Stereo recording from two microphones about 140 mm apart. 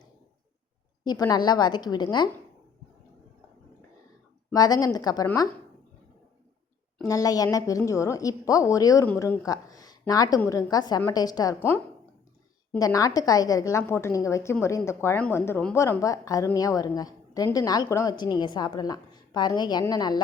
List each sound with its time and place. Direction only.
1.0 s a woman's voice: 25° left (ahead or behind)
4.5 s a woman's voice: 25° left (ahead or behind)
7.1 s a woman's voice: 25° left (ahead or behind)
12.8 s a woman's voice: 25° left (ahead or behind)